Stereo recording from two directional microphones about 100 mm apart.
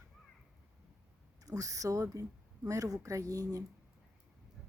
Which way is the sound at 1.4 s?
35° right (ahead or behind).